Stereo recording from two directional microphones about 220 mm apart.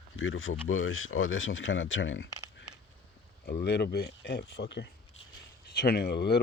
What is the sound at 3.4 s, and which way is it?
Speech, 45° left (ahead or behind).